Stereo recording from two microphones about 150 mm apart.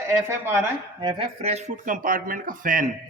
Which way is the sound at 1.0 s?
35° right (ahead or behind).